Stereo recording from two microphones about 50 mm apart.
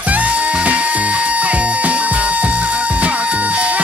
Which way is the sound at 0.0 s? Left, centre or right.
Right.